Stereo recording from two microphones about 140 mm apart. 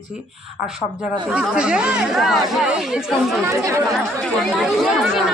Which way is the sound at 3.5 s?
20° right (ahead or behind).